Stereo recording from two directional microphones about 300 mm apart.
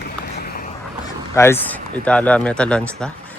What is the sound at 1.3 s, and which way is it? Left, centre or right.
Speech, centre.